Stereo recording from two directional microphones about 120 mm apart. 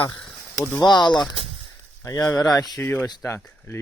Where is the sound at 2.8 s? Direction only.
15° left (ahead or behind).